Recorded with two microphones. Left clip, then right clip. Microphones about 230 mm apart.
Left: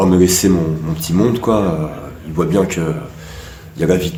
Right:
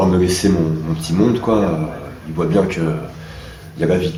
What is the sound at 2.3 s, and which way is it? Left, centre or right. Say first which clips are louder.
Speech: left 1 dB; left.